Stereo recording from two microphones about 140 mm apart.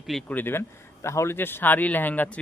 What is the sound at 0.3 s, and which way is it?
Speech, 15° left (ahead or behind).